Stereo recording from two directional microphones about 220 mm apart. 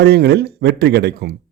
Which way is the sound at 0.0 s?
50° right (ahead or behind).